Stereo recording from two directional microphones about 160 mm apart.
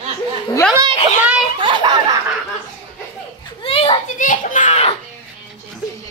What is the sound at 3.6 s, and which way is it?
Children playing, 35° left (ahead or behind).